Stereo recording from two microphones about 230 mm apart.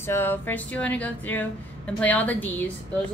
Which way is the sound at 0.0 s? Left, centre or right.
Centre.